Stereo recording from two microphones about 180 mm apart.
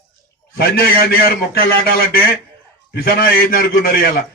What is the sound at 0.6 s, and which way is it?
A man's voice, 60° left (ahead or behind).